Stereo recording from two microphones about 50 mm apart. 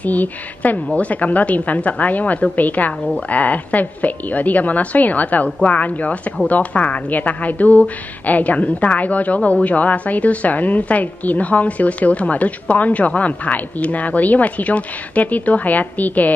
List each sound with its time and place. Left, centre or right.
0.0 s a woman's voice: left